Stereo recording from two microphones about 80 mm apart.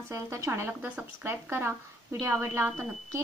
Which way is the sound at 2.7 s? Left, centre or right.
Centre.